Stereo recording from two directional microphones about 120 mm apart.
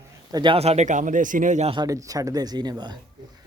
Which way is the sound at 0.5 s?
65° right (ahead or behind).